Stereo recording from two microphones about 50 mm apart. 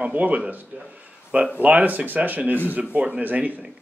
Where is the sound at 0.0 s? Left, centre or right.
Right.